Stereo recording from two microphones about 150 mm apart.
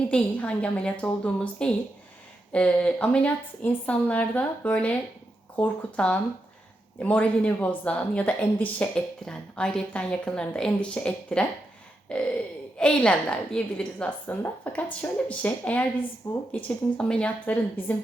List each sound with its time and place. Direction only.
0.1 s a woman's voice: 10° left (ahead or behind)